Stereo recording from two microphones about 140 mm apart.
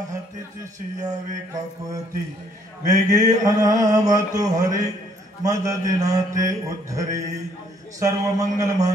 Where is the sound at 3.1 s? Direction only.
25° right (ahead or behind).